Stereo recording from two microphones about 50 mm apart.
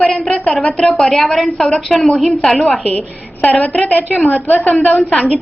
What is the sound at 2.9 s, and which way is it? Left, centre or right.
A woman's voice, left.